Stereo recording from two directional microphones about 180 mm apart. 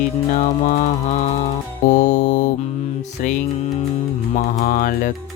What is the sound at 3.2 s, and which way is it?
Mantra, 45° left (ahead or behind).